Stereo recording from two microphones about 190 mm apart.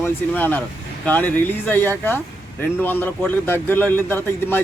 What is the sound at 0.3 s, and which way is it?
A man's voice, 10° left (ahead or behind).